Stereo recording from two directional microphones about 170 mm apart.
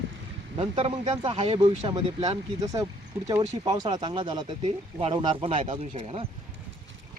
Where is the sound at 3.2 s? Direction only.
20° right (ahead or behind).